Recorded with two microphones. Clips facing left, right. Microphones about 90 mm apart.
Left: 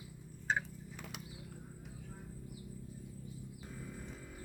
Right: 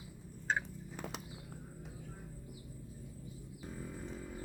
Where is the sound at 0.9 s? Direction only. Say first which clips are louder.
Right 6 dB; 35° right (ahead or behind).